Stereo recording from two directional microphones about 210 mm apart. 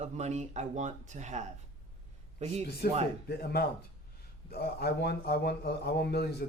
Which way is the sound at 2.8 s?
45° left (ahead or behind).